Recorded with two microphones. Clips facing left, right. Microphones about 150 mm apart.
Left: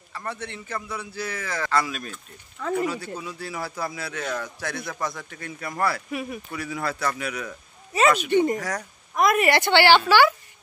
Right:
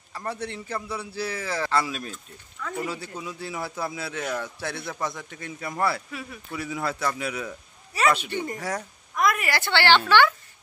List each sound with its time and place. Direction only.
0.3 s a man's voice: 35° right (ahead or behind)
7.9 s a woman's voice: 20° left (ahead or behind)